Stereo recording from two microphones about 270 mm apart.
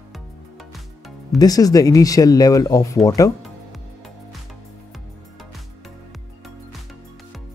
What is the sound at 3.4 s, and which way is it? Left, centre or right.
Music, centre.